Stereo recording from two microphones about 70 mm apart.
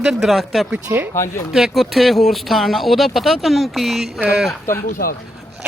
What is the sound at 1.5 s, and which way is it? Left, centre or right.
Speech, centre.